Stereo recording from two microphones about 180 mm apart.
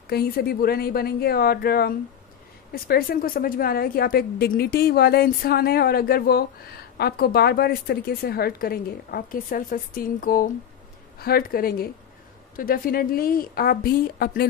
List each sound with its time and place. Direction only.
0.1 s a woman's voice: 60° left (ahead or behind)